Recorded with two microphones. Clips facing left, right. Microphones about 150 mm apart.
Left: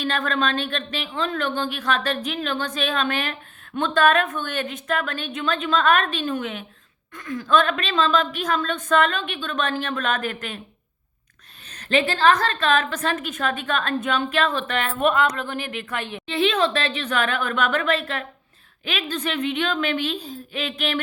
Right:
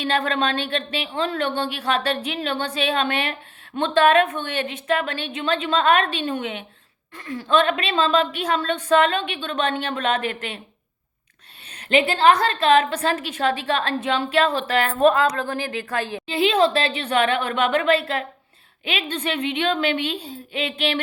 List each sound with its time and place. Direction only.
0.0 s a woman's voice: 30° right (ahead or behind)
11.8 s a woman's voice: 25° right (ahead or behind)